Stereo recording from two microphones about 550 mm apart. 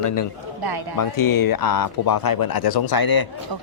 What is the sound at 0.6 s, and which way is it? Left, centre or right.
Speech, right.